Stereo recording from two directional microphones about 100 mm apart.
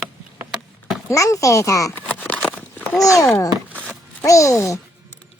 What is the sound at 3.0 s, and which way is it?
Speech, 35° left (ahead or behind).